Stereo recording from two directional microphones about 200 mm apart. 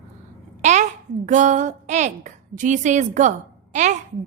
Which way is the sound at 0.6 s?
35° right (ahead or behind).